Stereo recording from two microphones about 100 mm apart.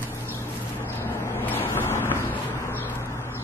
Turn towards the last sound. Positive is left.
turn(degrees=25)  # may be behind; listen again after turning